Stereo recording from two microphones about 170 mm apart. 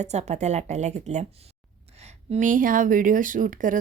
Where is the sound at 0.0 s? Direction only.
40° right (ahead or behind).